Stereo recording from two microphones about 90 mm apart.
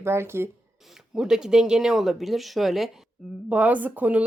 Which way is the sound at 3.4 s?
15° right (ahead or behind).